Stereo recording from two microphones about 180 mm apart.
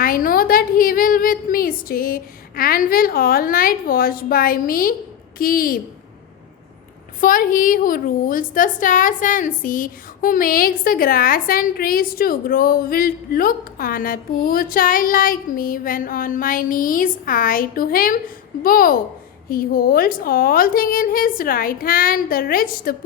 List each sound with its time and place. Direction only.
0.0 s a woman's voice: 50° left (ahead or behind)
7.2 s a woman's voice: 50° left (ahead or behind)